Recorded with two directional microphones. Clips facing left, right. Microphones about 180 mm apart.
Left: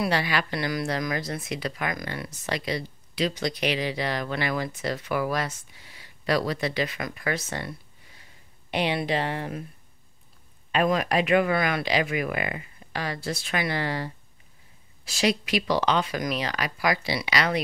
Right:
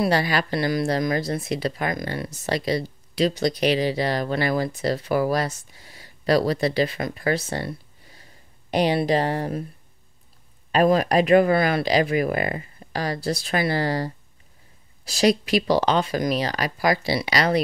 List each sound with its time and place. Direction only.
0.0 s speech: 40° right (ahead or behind)
10.7 s speech: 35° right (ahead or behind)